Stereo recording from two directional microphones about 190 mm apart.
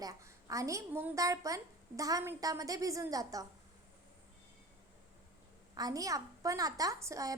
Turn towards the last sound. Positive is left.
turn(degrees=-15)  # may be behind; listen again after turning